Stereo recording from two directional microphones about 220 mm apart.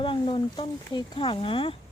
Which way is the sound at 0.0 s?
25° left (ahead or behind).